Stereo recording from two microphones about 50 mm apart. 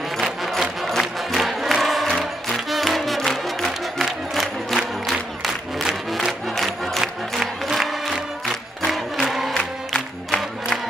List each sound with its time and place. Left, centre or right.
0.2 s music: centre
4.0 s crowd: centre
5.0 s music: centre
8.1 s crowd: centre
9.6 s music: centre